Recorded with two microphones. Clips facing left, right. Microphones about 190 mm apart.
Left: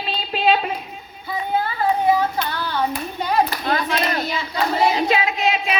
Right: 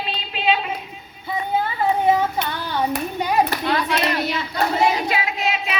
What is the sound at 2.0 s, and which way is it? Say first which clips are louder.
Hands: even; 20° right (ahead or behind).